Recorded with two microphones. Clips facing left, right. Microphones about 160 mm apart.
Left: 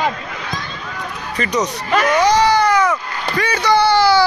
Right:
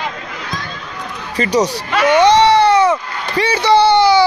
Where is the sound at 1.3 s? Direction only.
30° right (ahead or behind).